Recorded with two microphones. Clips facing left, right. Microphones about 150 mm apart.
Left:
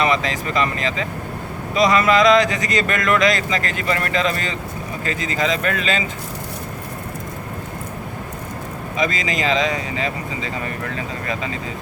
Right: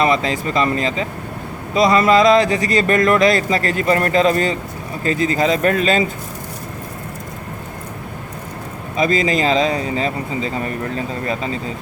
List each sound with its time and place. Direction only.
0.0 s speech: 35° right (ahead or behind)
9.0 s speech: 35° right (ahead or behind)